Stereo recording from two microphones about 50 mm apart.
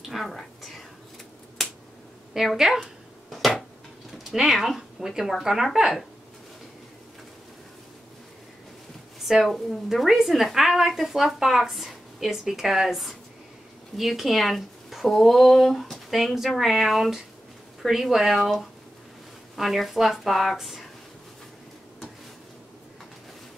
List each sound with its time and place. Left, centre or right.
0.1 s speech: centre
2.3 s speech: centre
3.3 s a sound: centre
4.2 s speech: centre
9.4 s a woman's voice: centre